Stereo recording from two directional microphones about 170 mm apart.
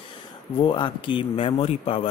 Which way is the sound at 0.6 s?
30° left (ahead or behind).